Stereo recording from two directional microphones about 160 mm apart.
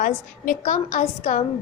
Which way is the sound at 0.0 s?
55° left (ahead or behind).